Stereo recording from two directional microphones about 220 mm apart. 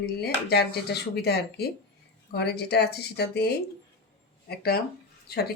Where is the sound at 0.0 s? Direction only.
45° left (ahead or behind).